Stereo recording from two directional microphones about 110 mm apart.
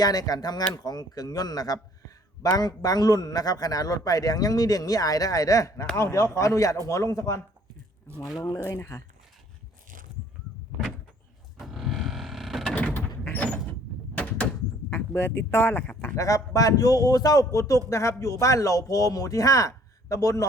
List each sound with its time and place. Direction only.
0.0 s speech: 35° left (ahead or behind)
8.6 s speech: 25° left (ahead or behind)
11.6 s power windows: centre (ahead or behind)
12.7 s mechanisms: 15° left (ahead or behind)
13.2 s sliding door: 15° left (ahead or behind)
14.8 s speech: 20° left (ahead or behind)
16.2 s speech: 30° left (ahead or behind)